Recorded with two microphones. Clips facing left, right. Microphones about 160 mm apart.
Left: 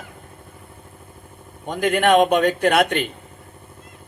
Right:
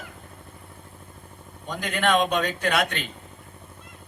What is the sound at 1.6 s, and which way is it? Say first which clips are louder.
A man's voice: left 7 dB; 55° left (ahead or behind).